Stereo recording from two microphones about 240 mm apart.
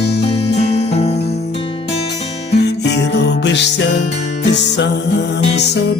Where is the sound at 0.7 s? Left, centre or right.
Left.